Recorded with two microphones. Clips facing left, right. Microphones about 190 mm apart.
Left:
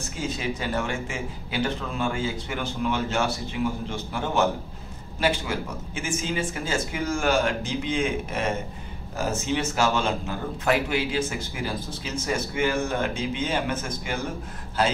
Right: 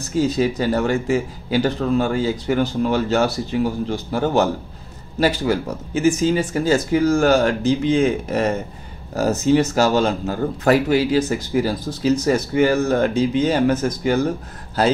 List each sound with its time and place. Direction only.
0.1 s a man's voice: 35° right (ahead or behind)